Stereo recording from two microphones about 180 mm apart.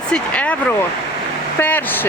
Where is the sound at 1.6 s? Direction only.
10° left (ahead or behind).